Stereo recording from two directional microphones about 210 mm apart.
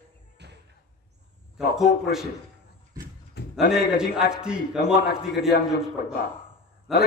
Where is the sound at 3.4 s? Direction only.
50° left (ahead or behind).